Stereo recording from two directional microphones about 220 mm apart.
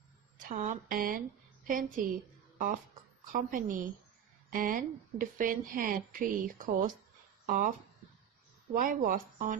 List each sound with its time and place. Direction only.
0.3 s a woman's voice: 35° right (ahead or behind)
8.7 s a woman's voice: 40° right (ahead or behind)